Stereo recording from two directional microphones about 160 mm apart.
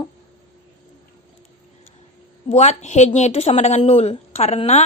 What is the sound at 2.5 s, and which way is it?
A woman's voice, 45° left (ahead or behind).